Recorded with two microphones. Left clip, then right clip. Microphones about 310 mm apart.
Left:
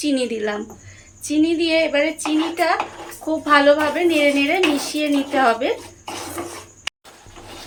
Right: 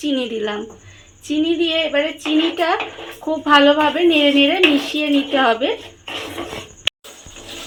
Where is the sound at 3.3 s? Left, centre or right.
Centre.